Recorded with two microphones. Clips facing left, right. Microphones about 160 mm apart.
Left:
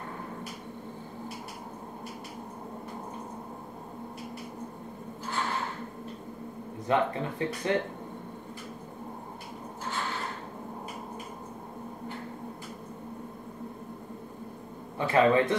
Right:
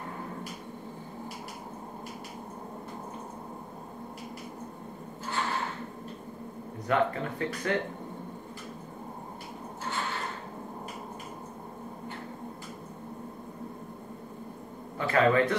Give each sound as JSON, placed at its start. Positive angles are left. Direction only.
{"t": 6.9, "sound": "speech", "side_deg": 20}
{"t": 15.0, "sound": "a man's voice", "side_deg": 20}